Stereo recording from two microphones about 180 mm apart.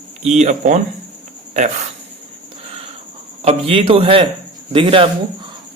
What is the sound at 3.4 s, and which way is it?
Speech, 30° right (ahead or behind).